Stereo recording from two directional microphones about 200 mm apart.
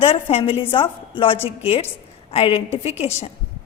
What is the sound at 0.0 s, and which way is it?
A woman's voice, 30° left (ahead or behind).